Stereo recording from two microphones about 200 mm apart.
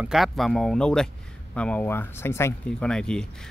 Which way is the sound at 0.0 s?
Centre (ahead or behind).